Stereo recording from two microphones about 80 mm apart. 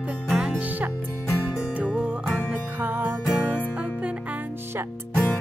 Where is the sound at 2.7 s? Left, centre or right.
Right.